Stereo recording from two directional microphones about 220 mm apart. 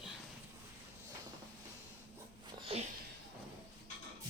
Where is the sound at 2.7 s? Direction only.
25° right (ahead or behind).